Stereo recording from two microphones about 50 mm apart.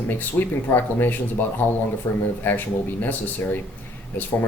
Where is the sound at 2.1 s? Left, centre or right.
Left.